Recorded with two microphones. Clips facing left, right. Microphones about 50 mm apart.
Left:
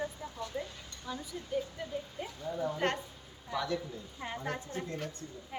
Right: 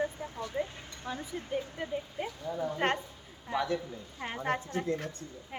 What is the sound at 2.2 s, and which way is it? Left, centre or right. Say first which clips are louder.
Speech: right 5 dB; right.